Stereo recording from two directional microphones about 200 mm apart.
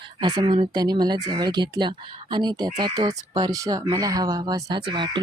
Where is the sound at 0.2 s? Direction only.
20° right (ahead or behind).